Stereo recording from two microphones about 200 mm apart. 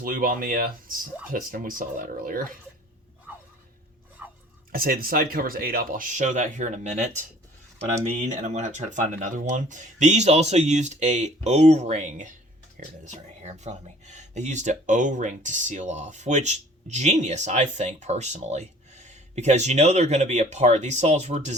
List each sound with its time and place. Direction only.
0.0 s speech: 45° right (ahead or behind)
4.7 s speech: 45° right (ahead or behind)
8.2 s speech: 35° right (ahead or behind)